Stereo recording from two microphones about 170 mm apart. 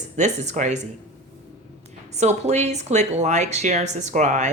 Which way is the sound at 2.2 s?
40° right (ahead or behind).